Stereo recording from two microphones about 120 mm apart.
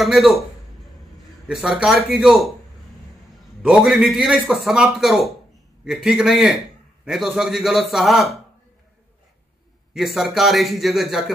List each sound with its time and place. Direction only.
0.0 s a man's voice: centre (ahead or behind)
1.5 s a man's voice: 5° right (ahead or behind)
3.6 s a man's voice: 5° right (ahead or behind)
9.9 s a man's voice: centre (ahead or behind)